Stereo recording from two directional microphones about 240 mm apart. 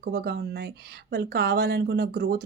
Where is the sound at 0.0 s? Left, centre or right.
Right.